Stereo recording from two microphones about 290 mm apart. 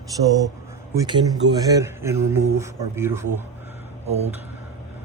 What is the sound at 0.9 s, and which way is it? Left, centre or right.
Speech, centre.